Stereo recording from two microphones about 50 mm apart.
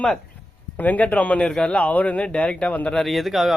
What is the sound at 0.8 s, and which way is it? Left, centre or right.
A man's voice, left.